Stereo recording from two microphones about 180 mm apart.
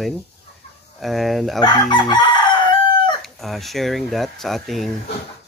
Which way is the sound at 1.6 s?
25° left (ahead or behind).